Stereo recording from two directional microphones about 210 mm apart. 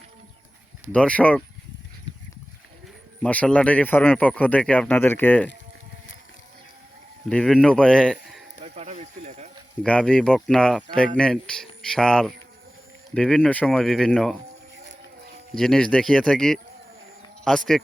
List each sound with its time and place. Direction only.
0.9 s speech: 5° left (ahead or behind)
3.2 s speech: 5° left (ahead or behind)
7.3 s speech: 5° left (ahead or behind)
8.6 s snake: 30° right (ahead or behind)
9.8 s speech: 5° left (ahead or behind)
15.5 s speech: 5° left (ahead or behind)